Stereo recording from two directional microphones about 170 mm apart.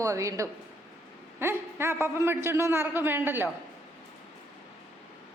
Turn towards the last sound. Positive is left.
turn(degrees=-10)  # may be behind; listen again after turning